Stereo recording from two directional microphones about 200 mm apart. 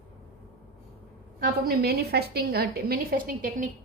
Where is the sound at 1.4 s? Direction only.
50° right (ahead or behind).